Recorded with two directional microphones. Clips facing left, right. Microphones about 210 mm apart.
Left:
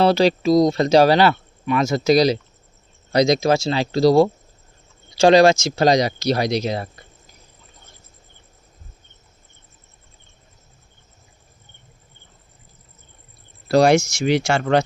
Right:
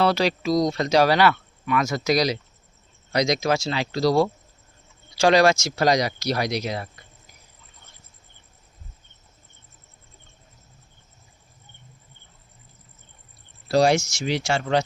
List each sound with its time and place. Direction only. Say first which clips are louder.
0.0 s speech: left 5 dB; 30° left (ahead or behind)
13.7 s speech: left 4 dB; 60° left (ahead or behind)